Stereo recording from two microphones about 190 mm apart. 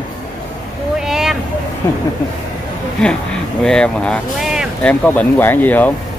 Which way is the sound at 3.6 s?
5° left (ahead or behind).